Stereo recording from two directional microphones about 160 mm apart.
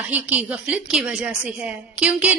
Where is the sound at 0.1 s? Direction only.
10° right (ahead or behind).